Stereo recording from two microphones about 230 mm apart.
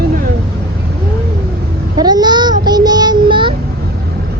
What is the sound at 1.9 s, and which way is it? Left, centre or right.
Child singing, centre.